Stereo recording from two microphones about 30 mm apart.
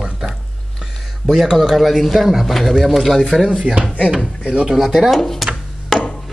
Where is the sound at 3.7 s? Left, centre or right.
Right.